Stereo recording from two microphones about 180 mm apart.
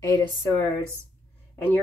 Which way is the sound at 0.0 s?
15° left (ahead or behind).